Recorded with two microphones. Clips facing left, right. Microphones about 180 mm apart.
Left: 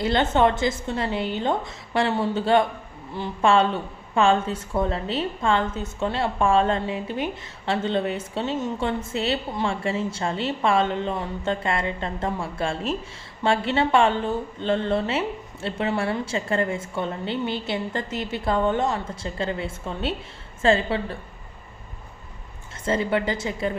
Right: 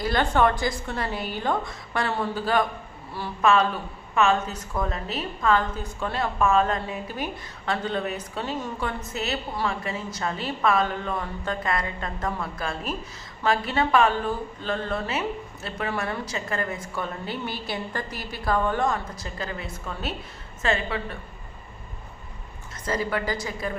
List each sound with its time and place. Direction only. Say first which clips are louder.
0.0 s speech: left 2 dB; 25° left (ahead or behind)
22.9 s speech: left 4 dB; 25° left (ahead or behind)